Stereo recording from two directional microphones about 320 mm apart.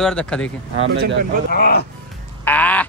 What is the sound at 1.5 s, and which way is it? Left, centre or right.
Speech, left.